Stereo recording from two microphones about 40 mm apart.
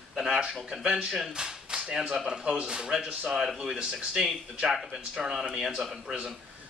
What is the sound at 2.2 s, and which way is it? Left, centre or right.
Speech, centre.